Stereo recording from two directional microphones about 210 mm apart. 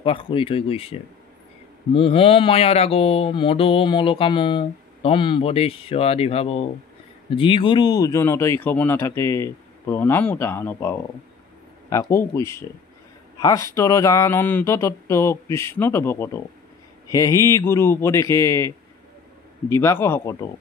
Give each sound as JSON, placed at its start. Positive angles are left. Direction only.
{"t": 0.0, "sound": "mantra", "side_deg": 25}
{"t": 2.0, "sound": "mantra", "side_deg": 25}
{"t": 7.2, "sound": "speech", "side_deg": 25}
{"t": 19.7, "sound": "speech", "side_deg": 10}